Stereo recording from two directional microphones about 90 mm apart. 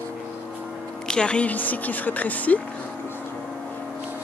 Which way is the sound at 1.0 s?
10° left (ahead or behind).